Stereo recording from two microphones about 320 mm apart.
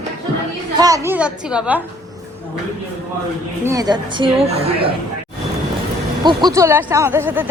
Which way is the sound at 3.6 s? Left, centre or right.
Centre.